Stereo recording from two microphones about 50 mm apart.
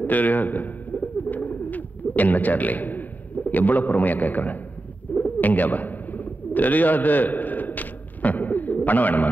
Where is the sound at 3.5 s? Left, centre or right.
Left.